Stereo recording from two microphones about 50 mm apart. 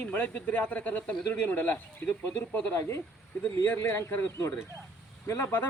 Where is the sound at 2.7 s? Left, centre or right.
Left.